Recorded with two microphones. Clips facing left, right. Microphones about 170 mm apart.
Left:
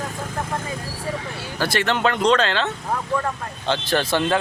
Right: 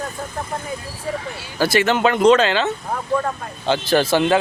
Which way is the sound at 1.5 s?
5° right (ahead or behind).